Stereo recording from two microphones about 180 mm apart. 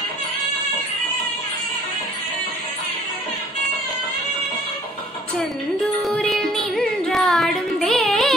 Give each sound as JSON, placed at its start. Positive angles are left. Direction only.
{"t": 6.0, "sound": "music", "side_deg": 0}